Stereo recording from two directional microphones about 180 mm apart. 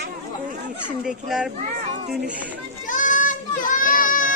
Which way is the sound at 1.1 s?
5° right (ahead or behind).